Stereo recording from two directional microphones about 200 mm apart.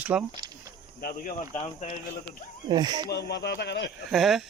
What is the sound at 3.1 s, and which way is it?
Speech, 55° left (ahead or behind).